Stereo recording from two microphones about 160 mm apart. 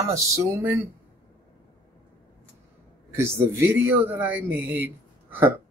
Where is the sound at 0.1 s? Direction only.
20° right (ahead or behind).